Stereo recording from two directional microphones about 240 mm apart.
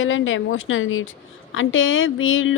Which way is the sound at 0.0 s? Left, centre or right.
Left.